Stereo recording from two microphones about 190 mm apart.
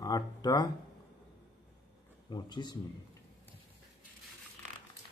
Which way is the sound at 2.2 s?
20° left (ahead or behind).